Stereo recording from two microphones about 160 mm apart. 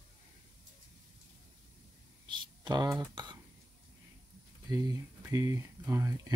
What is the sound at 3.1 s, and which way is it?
Speech, 25° right (ahead or behind).